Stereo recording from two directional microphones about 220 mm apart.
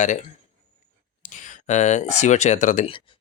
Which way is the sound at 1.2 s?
35° left (ahead or behind).